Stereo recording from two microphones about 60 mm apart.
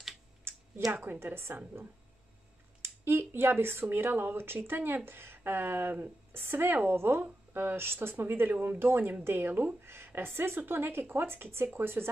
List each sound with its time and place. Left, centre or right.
1.2 s speech: right
2.8 s speech: right